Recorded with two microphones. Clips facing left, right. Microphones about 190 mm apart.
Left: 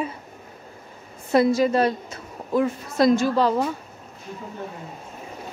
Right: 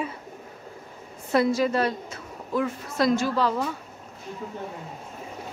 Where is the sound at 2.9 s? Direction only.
15° left (ahead or behind).